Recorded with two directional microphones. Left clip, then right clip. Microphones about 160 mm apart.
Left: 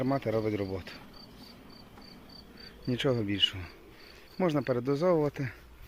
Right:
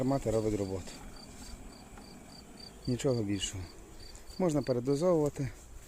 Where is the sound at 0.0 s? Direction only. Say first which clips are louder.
Left 1 dB; 15° right (ahead or behind).